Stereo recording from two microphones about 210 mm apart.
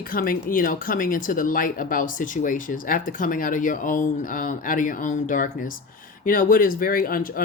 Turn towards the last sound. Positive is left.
turn(degrees=45)  # may be behind; listen again after turning